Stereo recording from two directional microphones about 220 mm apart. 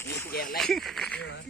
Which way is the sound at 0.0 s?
10° left (ahead or behind).